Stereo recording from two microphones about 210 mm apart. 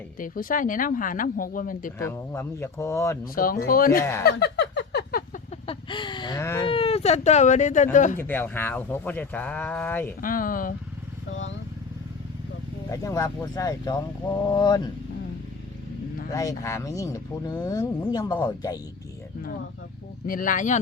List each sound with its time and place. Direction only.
0.2 s speech: 40° left (ahead or behind)
2.0 s speech: 10° left (ahead or behind)
3.3 s speech: 45° left (ahead or behind)
4.2 s a sound: 50° left (ahead or behind)
5.6 s a sound: 20° left (ahead or behind)
6.7 s speech: 25° left (ahead or behind)
8.2 s speech: 10° left (ahead or behind)
10.2 s speech: 40° left (ahead or behind)
11.3 s speech: 65° left (ahead or behind)
12.9 s speech: 15° left (ahead or behind)
16.3 s speech: 15° left (ahead or behind)
20.2 s speech: 40° left (ahead or behind)